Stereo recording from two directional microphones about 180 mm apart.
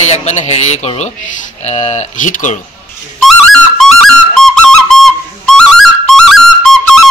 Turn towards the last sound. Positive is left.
turn(degrees=0)  # may be behind; listen again after turning